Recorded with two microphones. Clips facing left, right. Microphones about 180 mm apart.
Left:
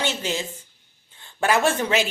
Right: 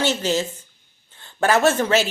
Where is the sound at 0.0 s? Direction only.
40° right (ahead or behind).